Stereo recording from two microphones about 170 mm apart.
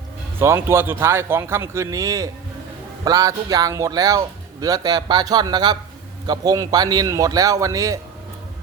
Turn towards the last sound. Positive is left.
turn(degrees=-20)  # may be behind; listen again after turning